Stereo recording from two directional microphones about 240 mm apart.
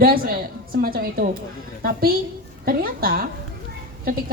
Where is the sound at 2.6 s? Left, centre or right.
Right.